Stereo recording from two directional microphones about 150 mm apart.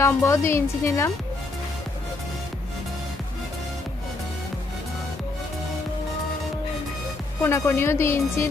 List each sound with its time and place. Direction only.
0.0 s a woman's voice: 20° left (ahead or behind)
7.4 s a woman's voice: 15° left (ahead or behind)